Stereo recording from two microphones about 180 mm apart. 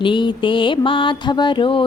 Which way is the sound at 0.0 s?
25° left (ahead or behind).